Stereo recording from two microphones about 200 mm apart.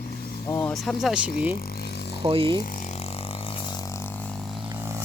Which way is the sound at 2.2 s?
25° right (ahead or behind).